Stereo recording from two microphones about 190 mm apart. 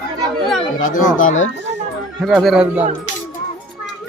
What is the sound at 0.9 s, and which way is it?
Speech, 45° left (ahead or behind).